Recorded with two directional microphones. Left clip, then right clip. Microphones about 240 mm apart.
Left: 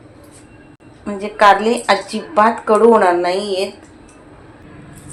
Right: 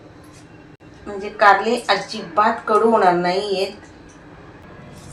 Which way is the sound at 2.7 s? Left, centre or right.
Left.